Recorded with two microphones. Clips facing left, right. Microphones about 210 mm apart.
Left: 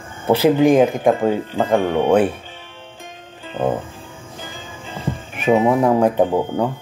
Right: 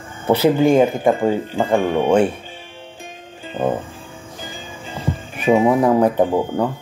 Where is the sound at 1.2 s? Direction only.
10° right (ahead or behind).